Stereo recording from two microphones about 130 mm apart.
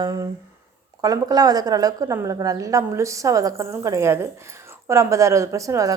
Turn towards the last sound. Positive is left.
turn(degrees=-25)  # may be behind; listen again after turning